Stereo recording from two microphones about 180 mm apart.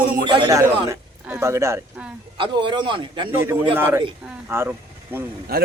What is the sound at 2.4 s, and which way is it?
Speech, 25° right (ahead or behind).